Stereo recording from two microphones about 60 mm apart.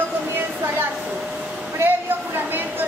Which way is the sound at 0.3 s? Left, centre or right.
Right.